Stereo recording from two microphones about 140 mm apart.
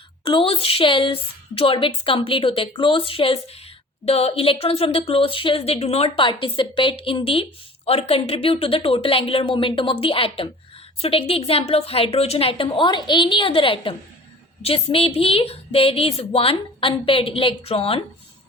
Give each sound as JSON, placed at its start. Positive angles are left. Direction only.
{"t": 0.3, "sound": "a woman's voice", "side_deg": 40}